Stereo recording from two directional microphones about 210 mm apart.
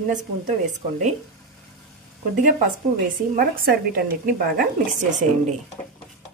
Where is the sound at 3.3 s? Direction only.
45° right (ahead or behind).